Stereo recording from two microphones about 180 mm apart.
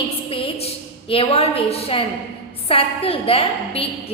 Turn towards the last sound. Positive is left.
turn(degrees=30)  # may be behind; listen again after turning